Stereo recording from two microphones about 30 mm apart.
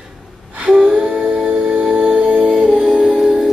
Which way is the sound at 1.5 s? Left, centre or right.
Right.